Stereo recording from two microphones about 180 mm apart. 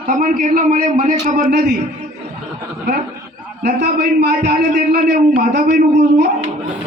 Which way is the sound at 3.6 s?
65° right (ahead or behind).